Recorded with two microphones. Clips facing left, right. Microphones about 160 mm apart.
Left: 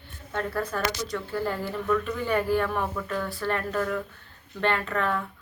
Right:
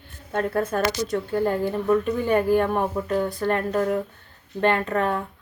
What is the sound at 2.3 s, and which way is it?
Speech, 50° right (ahead or behind).